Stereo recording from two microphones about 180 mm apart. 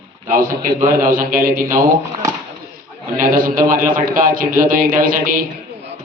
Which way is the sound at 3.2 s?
50° right (ahead or behind).